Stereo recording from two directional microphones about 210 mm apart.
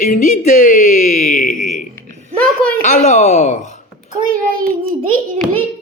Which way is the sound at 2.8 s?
35° left (ahead or behind).